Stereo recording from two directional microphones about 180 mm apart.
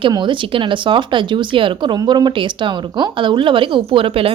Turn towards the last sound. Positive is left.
turn(degrees=-30)  # may be behind; listen again after turning